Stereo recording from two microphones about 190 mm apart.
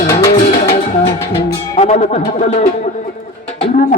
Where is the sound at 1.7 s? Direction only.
35° left (ahead or behind).